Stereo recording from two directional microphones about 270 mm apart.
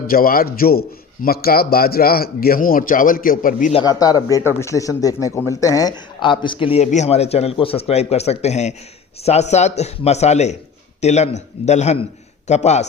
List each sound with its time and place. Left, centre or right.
0.1 s a man's voice: left